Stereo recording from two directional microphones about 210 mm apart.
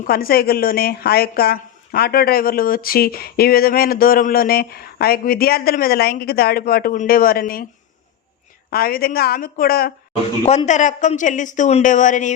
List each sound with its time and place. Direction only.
0.1 s speech: 45° left (ahead or behind)
8.7 s speech: 45° left (ahead or behind)
10.4 s speech: 30° left (ahead or behind)